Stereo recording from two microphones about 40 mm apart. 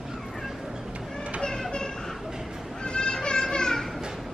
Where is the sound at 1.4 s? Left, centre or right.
Centre.